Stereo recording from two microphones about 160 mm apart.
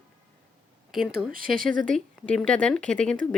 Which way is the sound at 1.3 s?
60° right (ahead or behind).